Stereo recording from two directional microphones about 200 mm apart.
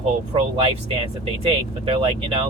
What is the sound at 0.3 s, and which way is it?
Speech, 30° right (ahead or behind).